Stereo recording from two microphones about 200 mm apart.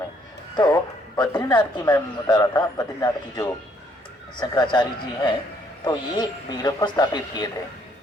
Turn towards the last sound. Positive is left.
turn(degrees=20)  # may be behind; listen again after turning